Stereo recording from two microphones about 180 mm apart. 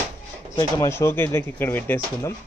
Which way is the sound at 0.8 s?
15° left (ahead or behind).